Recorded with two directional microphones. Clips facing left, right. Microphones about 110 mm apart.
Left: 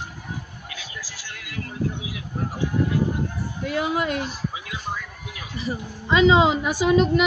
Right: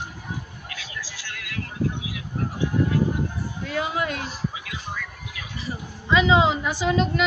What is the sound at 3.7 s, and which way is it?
Speech, 15° left (ahead or behind).